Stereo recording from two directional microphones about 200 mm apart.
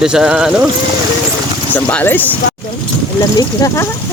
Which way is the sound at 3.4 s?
15° left (ahead or behind).